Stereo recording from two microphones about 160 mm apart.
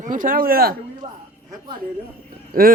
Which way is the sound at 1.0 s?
45° right (ahead or behind).